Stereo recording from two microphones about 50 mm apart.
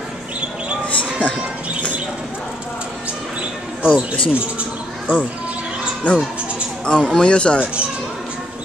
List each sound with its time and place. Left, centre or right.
0.8 s a sound: left
3.8 s speech: right
6.0 s speech: left